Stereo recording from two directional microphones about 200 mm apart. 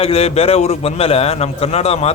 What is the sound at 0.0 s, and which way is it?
A man's voice, 30° left (ahead or behind).